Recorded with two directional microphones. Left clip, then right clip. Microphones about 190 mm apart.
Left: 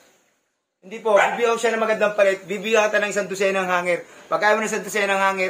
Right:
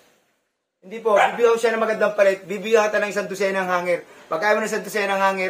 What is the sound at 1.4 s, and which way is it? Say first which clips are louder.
A man's voice: right 2 dB; 10° right (ahead or behind).